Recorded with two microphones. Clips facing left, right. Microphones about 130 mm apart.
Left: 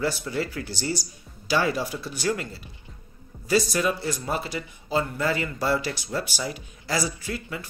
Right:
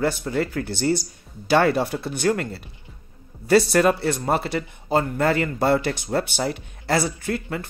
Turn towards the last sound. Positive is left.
turn(degrees=-50)  # may be behind; listen again after turning